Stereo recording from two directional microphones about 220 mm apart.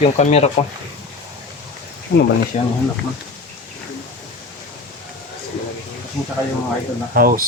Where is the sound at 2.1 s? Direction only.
40° left (ahead or behind).